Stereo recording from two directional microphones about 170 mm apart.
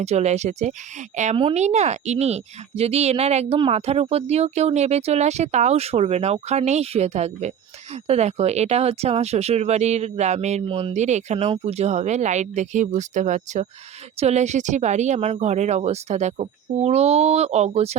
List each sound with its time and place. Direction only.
0.0 s a woman's voice: 40° right (ahead or behind)